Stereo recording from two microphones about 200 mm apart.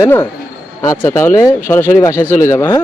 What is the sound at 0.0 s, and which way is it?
Speech, 10° left (ahead or behind).